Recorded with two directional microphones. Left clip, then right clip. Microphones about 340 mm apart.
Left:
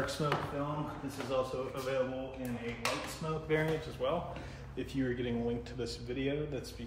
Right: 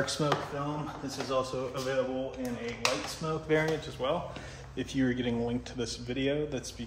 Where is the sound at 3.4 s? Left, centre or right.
Right.